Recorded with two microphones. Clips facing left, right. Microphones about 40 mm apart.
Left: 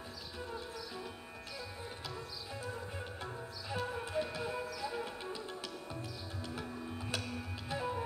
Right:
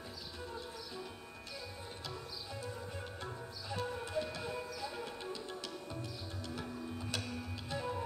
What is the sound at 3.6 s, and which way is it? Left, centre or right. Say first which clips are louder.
Music: left 1 dB; centre.